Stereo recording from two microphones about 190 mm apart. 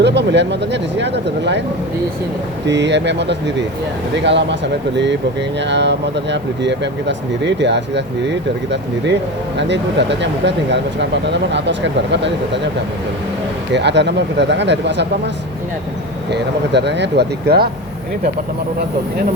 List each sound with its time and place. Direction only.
0.0 s speech: 65° right (ahead or behind)
2.6 s speech: 65° right (ahead or behind)
5.5 s speech: 65° right (ahead or behind)
13.7 s speech: 65° right (ahead or behind)
16.3 s speech: 65° right (ahead or behind)